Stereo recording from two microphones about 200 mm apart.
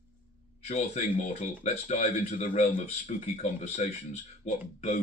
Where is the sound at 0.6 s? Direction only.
35° left (ahead or behind).